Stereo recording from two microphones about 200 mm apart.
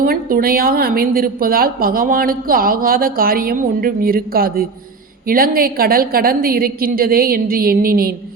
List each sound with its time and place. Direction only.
0.0 s a woman's voice: 45° right (ahead or behind)